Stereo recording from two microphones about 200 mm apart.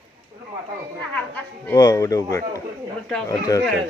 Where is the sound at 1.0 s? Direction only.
5° left (ahead or behind).